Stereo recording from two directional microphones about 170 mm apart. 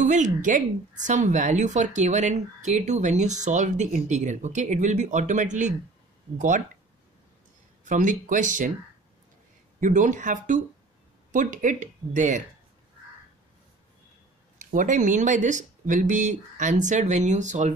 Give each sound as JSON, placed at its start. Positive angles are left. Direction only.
{"t": 0.0, "sound": "a woman's voice", "side_deg": -45}
{"t": 7.8, "sound": "a woman's voice", "side_deg": -50}
{"t": 9.8, "sound": "a woman's voice", "side_deg": -50}
{"t": 14.6, "sound": "a woman's voice", "side_deg": -50}